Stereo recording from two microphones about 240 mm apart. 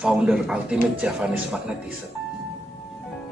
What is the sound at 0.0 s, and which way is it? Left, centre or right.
A man's voice, centre.